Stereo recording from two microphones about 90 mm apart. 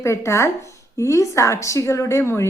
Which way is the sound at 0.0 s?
30° left (ahead or behind).